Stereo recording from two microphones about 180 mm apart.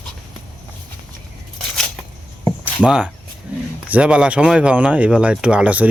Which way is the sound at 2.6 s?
5° right (ahead or behind).